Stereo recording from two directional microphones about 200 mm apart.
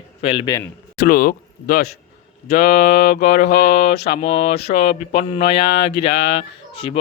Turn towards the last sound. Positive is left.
turn(degrees=30)  # may be behind; listen again after turning